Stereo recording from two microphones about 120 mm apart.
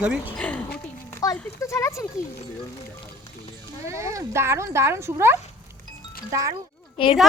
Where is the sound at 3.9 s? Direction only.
25° right (ahead or behind).